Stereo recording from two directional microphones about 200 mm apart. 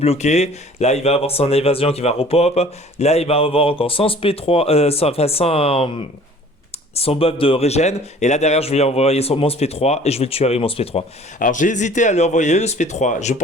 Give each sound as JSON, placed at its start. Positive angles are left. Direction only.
{"t": 0.0, "sound": "speech", "side_deg": 30}
{"t": 11.3, "sound": "speech", "side_deg": 40}